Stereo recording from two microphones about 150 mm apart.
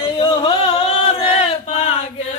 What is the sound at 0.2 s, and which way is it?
Chant, 40° left (ahead or behind).